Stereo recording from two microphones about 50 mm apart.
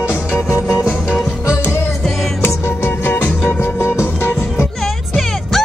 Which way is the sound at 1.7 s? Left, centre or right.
Left.